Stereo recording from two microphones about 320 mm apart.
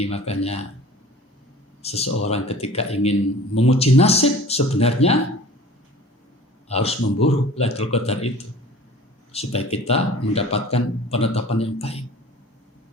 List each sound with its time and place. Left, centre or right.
0.0 s a man's voice: centre
1.8 s a man's voice: centre
6.7 s a man's voice: centre
9.3 s a man's voice: centre